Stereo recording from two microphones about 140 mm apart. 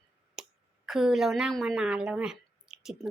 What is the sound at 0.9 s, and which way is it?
A woman's voice, 5° right (ahead or behind).